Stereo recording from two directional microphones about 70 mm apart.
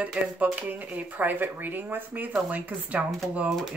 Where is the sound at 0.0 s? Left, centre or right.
Right.